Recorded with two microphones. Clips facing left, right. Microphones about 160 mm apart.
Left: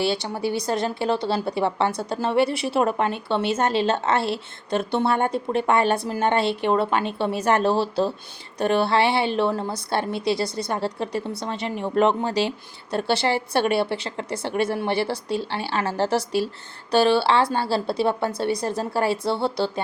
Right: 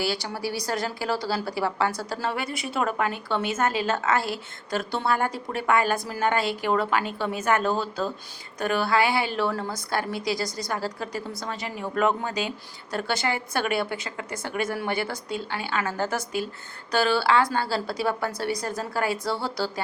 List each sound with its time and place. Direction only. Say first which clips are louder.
0.0 s speech: left 4 dB; 25° left (ahead or behind)